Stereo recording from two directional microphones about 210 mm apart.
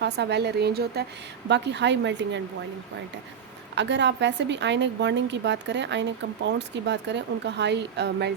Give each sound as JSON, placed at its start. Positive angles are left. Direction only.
{"t": 0.0, "sound": "a woman's voice", "side_deg": -55}
{"t": 3.8, "sound": "a woman's voice", "side_deg": -55}